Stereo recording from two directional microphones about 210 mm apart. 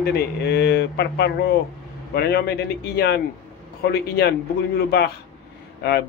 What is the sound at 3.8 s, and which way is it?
Speech, 50° left (ahead or behind).